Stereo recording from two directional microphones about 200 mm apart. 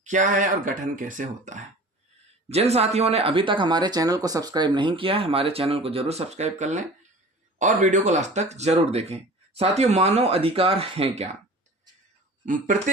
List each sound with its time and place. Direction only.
0.0 s speech: 40° right (ahead or behind)
12.5 s speech: 40° right (ahead or behind)